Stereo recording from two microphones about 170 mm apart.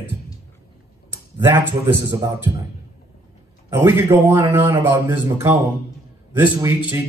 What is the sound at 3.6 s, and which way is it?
Speech, 15° right (ahead or behind).